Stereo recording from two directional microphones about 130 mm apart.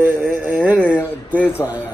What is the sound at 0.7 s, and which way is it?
Speech, 10° left (ahead or behind).